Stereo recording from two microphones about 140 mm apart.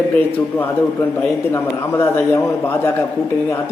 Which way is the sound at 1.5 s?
15° left (ahead or behind).